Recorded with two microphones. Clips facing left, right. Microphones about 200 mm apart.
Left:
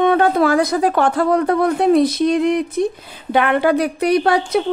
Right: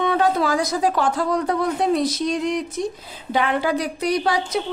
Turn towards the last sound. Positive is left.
turn(degrees=60)  # may be behind; listen again after turning